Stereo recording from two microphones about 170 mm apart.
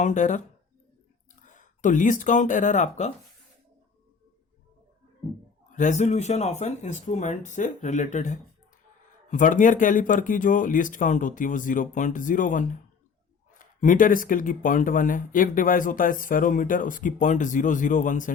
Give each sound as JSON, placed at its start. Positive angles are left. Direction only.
{"t": 0.0, "sound": "speech", "side_deg": 45}
{"t": 1.5, "sound": "speech", "side_deg": 50}
{"t": 5.7, "sound": "speech", "side_deg": 45}